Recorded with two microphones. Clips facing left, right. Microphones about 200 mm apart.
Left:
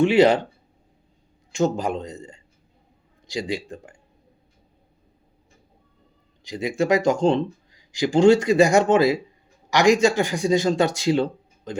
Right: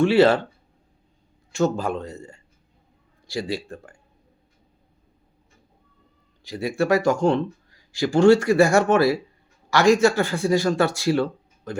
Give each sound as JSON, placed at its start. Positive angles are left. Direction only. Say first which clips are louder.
{"t": 0.0, "sound": "speech", "louder": "even", "side_deg": 15}
{"t": 1.5, "sound": "speech", "louder": "even", "side_deg": 15}
{"t": 6.4, "sound": "speech", "louder": "even", "side_deg": 15}